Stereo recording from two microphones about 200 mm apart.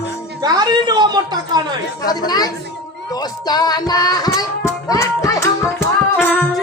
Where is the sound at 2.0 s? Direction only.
20° left (ahead or behind).